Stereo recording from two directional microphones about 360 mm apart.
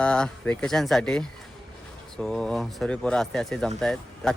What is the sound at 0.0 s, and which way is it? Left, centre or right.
Speech, centre.